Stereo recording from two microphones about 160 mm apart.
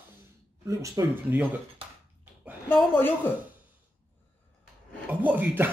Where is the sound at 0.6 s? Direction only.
20° right (ahead or behind).